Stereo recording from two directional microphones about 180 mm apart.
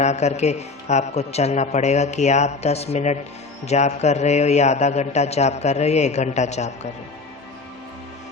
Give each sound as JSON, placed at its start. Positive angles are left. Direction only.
{"t": 0.0, "sound": "a man's voice", "side_deg": 40}